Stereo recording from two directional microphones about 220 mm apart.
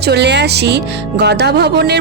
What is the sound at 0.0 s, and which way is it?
Speech, 50° right (ahead or behind).